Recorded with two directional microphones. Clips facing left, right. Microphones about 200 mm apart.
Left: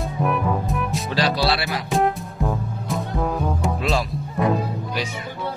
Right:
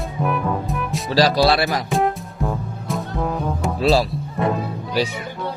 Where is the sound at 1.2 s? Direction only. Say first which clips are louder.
Right 6 dB; 40° right (ahead or behind).